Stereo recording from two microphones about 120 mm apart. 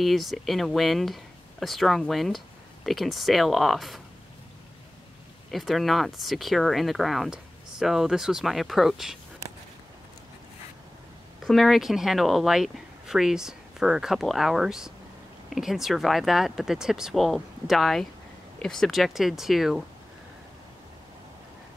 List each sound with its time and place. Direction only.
0.0 s speech: centre (ahead or behind)
5.5 s speech: centre (ahead or behind)
11.4 s speech: centre (ahead or behind)